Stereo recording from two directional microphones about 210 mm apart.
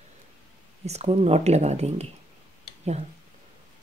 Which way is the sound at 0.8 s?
30° right (ahead or behind).